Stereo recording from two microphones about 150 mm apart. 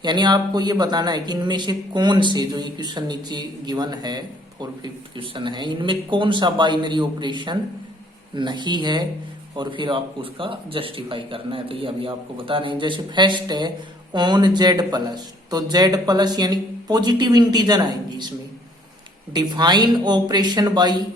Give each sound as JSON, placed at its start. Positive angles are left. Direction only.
{"t": 0.0, "sound": "a man's voice", "side_deg": -30}
{"t": 19.3, "sound": "a man's voice", "side_deg": -30}